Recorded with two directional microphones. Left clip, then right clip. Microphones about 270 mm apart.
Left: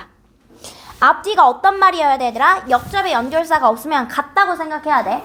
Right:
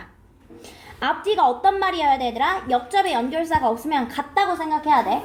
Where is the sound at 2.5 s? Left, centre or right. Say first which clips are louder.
Left 8 dB; left.